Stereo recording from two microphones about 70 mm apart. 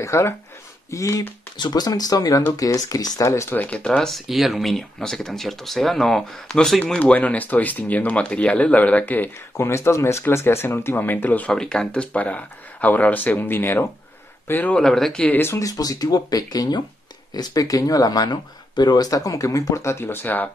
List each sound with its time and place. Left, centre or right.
0.0 s speech: left
1.6 s speech: left
3.3 s speech: left
3.5 s speech: centre
4.0 s speech: centre
6.8 s speech: centre
9.6 s speech: left
11.5 s speech: centre; by 14.8 s left
14.8 s speech: centre
15.2 s speech: left
15.6 s speech: left